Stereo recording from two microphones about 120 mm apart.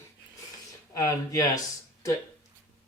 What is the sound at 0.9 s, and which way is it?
Speech, 25° left (ahead or behind).